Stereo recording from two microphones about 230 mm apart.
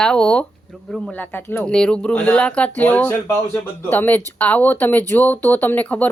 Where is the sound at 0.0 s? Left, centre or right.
Centre.